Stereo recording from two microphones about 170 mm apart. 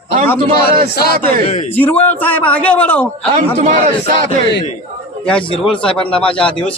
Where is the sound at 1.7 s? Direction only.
10° left (ahead or behind).